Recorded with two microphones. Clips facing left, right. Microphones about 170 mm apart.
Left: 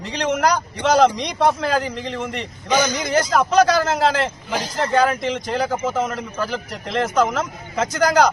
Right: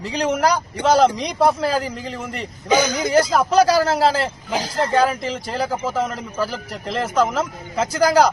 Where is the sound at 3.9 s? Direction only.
35° right (ahead or behind).